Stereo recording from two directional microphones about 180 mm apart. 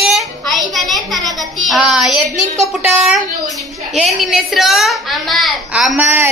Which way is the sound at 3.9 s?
Centre (ahead or behind).